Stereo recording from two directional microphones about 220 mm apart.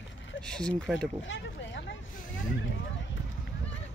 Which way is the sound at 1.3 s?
55° left (ahead or behind).